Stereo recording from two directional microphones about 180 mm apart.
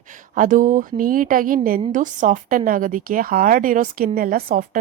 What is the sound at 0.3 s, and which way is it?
Speech, 45° right (ahead or behind).